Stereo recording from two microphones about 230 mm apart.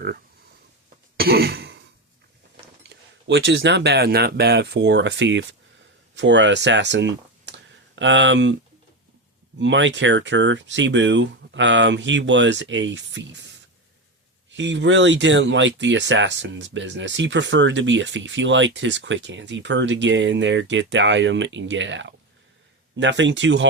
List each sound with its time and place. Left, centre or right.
1.1 s throat clearing: right
3.2 s speech: right
9.6 s speech: right
14.5 s speech: right